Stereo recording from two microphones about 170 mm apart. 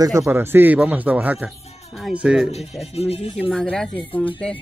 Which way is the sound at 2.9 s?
35° left (ahead or behind).